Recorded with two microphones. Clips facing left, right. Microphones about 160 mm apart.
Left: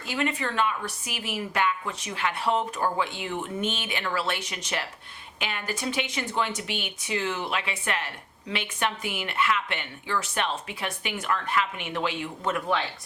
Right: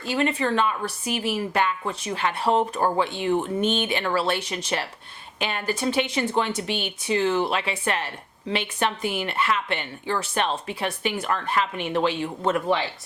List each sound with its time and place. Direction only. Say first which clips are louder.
0.0 s a woman's voice: right 5 dB; 35° right (ahead or behind)